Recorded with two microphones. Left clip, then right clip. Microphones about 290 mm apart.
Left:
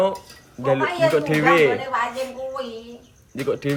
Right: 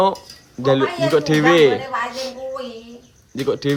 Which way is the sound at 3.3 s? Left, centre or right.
Centre.